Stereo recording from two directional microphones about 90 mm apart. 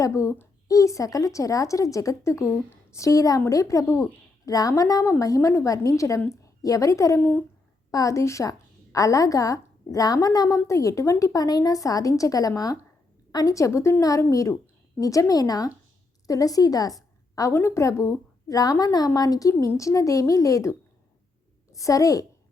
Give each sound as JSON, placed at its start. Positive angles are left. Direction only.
{"t": 0.0, "sound": "a woman's voice", "side_deg": 35}
{"t": 7.2, "sound": "speech", "side_deg": 20}
{"t": 7.9, "sound": "a woman's voice", "side_deg": 40}
{"t": 17.5, "sound": "a woman's voice", "side_deg": 30}
{"t": 21.8, "sound": "a woman's voice", "side_deg": 40}